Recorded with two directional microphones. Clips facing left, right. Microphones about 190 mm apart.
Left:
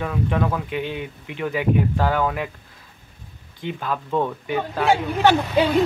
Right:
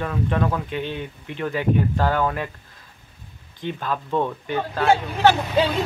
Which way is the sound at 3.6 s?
5° left (ahead or behind).